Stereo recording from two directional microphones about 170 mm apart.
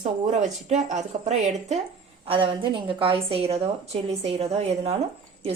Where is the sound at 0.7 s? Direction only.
40° right (ahead or behind).